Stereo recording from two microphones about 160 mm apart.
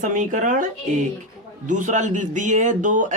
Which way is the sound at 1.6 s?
50° right (ahead or behind).